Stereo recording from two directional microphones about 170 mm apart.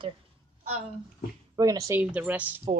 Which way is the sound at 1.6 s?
20° right (ahead or behind).